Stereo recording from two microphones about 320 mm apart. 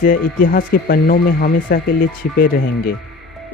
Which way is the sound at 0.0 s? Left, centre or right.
Left.